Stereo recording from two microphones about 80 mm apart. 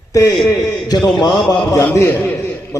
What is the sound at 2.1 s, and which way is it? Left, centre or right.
Speech, left.